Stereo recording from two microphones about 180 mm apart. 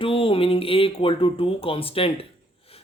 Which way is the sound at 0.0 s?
30° left (ahead or behind).